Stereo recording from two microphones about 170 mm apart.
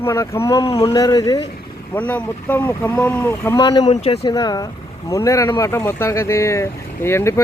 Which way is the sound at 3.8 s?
40° left (ahead or behind).